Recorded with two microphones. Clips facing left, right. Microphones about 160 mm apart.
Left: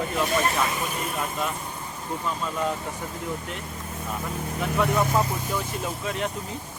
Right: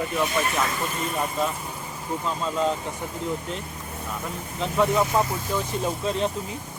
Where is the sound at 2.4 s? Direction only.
20° right (ahead or behind).